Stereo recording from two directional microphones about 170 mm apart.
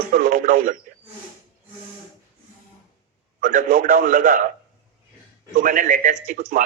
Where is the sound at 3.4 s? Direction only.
55° right (ahead or behind).